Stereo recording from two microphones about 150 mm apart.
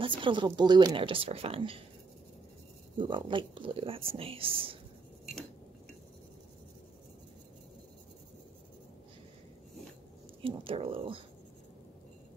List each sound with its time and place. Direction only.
0.2 s speech: 30° right (ahead or behind)
3.0 s speech: 35° right (ahead or behind)
10.4 s speech: 35° right (ahead or behind)